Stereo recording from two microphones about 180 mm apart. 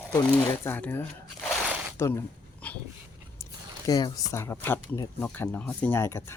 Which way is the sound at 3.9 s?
20° left (ahead or behind).